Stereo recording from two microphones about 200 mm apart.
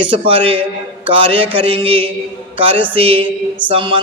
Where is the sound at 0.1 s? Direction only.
30° right (ahead or behind).